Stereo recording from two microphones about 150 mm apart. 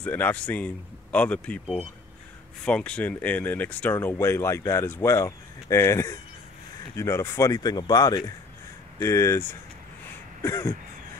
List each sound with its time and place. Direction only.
0.0 s speech: 10° left (ahead or behind)